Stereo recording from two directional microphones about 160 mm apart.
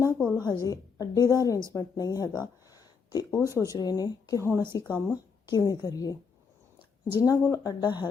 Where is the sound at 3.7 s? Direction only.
25° left (ahead or behind).